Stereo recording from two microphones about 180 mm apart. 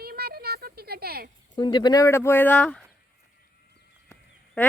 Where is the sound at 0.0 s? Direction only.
60° right (ahead or behind).